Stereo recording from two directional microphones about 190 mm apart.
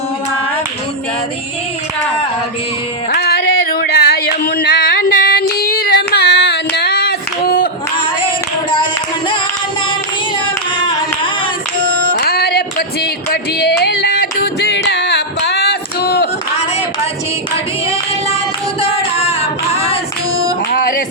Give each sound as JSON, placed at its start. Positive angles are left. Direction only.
{"t": 3.1, "sound": "singing", "side_deg": 55}
{"t": 12.1, "sound": "singing", "side_deg": 55}
{"t": 14.6, "sound": "a sound", "side_deg": 65}
{"t": 18.8, "sound": "singing", "side_deg": 30}
{"t": 20.7, "sound": "music", "side_deg": 50}